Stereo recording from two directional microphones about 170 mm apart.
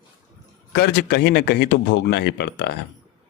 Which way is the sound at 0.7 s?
75° left (ahead or behind).